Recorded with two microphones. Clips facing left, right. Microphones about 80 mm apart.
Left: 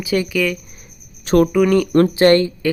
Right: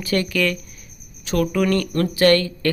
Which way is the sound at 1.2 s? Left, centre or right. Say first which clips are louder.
Left 8 dB; left.